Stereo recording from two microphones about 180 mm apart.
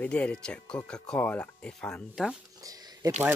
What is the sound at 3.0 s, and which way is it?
Speech, 20° right (ahead or behind).